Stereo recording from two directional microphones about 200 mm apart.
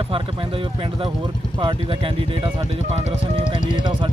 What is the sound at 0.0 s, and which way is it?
Speech, 25° right (ahead or behind).